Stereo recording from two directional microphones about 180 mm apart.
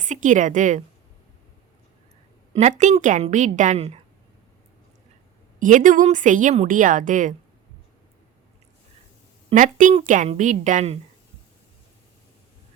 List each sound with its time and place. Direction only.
0.0 s a woman's voice: 45° right (ahead or behind)
2.6 s a woman's voice: 40° right (ahead or behind)
5.5 s a woman's voice: 45° right (ahead or behind)
9.6 s a woman's voice: 45° right (ahead or behind)